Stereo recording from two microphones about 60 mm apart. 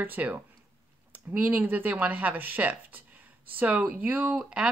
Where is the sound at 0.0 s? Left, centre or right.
Right.